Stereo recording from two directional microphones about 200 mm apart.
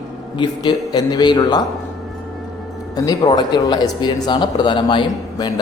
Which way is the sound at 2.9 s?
20° left (ahead or behind).